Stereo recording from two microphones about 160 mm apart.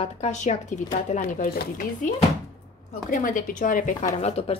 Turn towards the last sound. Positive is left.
turn(degrees=40)  # may be behind; listen again after turning